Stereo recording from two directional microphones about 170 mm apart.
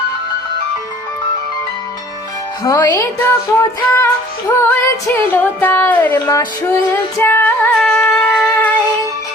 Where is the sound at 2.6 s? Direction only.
20° left (ahead or behind).